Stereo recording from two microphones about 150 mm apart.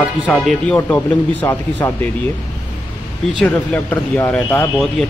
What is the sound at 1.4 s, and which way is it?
Speech, 15° left (ahead or behind).